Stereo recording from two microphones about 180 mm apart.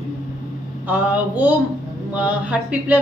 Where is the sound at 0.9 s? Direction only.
10° right (ahead or behind).